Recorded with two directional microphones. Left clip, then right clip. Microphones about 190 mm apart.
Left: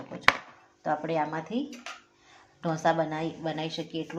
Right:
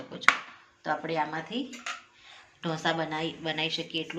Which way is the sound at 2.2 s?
50° left (ahead or behind).